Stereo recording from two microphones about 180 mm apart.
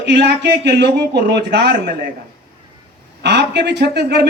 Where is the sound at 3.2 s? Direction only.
70° right (ahead or behind).